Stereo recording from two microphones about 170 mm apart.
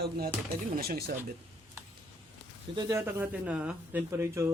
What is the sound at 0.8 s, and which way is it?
Speech, 65° right (ahead or behind).